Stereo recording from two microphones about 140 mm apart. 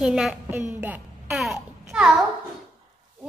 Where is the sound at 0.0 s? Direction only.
5° right (ahead or behind).